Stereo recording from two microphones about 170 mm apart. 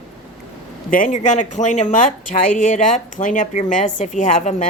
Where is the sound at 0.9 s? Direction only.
50° left (ahead or behind).